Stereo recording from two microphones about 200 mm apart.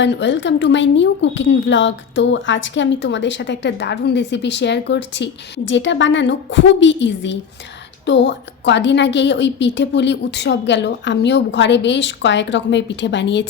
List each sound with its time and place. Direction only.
0.0 s a woman's voice: 65° left (ahead or behind)